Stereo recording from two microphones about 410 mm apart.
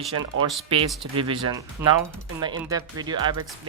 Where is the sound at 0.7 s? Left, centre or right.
Centre.